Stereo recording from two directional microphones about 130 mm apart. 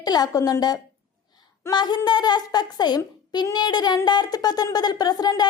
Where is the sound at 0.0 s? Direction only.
30° left (ahead or behind).